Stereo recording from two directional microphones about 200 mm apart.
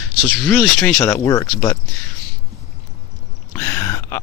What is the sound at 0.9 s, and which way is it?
Speech, 15° left (ahead or behind).